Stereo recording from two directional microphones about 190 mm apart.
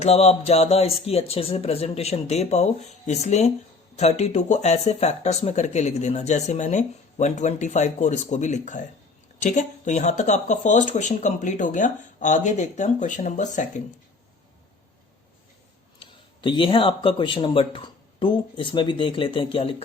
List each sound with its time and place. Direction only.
0.0 s speech: 35° left (ahead or behind)
16.0 s speech: 25° left (ahead or behind)